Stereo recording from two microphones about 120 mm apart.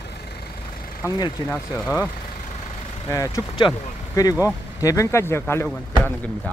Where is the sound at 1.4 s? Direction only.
40° left (ahead or behind).